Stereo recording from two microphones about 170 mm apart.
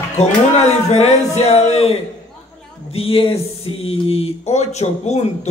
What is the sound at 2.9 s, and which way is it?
Speech, 35° left (ahead or behind).